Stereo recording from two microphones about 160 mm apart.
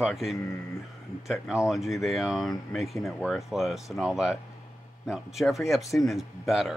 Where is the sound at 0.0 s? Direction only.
Centre (ahead or behind).